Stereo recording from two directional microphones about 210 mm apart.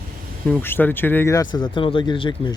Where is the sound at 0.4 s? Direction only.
10° left (ahead or behind).